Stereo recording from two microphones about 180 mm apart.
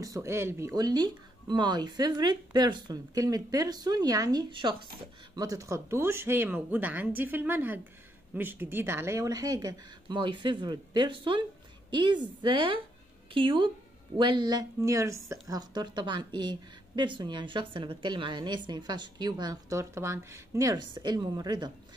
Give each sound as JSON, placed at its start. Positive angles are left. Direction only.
{"t": 0.0, "sound": "speech", "side_deg": -15}